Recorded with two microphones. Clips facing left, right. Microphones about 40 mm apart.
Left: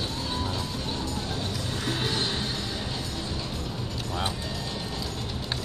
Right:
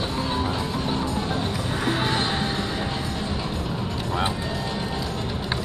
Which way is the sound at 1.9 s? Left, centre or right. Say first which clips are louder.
Right 5 dB; centre.